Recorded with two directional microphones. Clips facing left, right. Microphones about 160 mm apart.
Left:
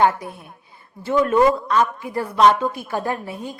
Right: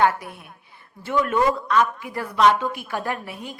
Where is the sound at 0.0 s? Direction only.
25° left (ahead or behind).